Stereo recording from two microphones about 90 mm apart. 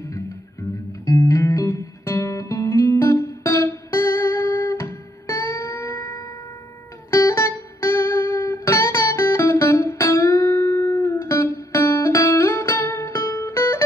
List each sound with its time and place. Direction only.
1.0 s music: 35° left (ahead or behind)